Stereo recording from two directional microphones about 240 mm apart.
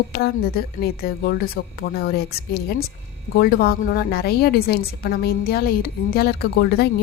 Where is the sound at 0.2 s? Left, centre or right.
Left.